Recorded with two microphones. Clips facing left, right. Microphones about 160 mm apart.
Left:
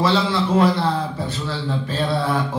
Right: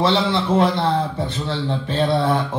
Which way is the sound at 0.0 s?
25° right (ahead or behind).